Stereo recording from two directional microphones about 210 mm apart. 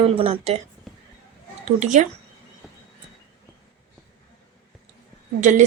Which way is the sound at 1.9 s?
35° right (ahead or behind).